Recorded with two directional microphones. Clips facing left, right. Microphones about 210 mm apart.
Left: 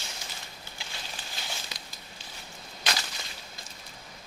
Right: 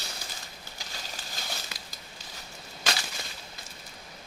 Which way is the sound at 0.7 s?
40° right (ahead or behind).